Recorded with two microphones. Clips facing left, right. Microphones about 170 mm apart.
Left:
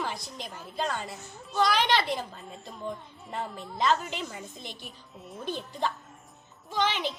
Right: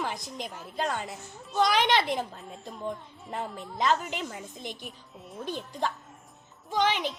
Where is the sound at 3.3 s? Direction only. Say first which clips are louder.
Even; 5° right (ahead or behind).